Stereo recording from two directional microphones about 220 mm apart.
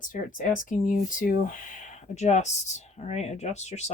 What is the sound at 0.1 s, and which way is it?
Speech, 35° left (ahead or behind).